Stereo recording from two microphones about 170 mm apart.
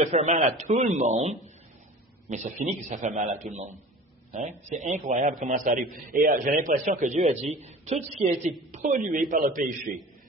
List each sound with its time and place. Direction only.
0.0 s a man's voice: 45° right (ahead or behind)